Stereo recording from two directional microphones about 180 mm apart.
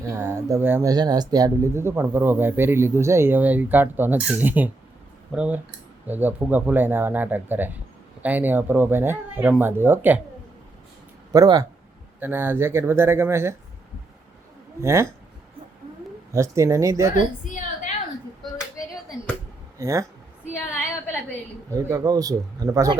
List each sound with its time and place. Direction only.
0.0 s speech: 15° right (ahead or behind)
11.3 s speech: 20° right (ahead or behind)
14.8 s speech: 15° right (ahead or behind)
16.3 s speech: 15° right (ahead or behind)
17.4 s a sound: 45° left (ahead or behind)
19.8 s a sound: 20° right (ahead or behind)
21.7 s speech: 20° right (ahead or behind)